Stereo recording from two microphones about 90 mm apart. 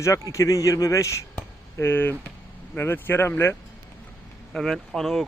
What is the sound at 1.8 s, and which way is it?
Speech, 25° left (ahead or behind).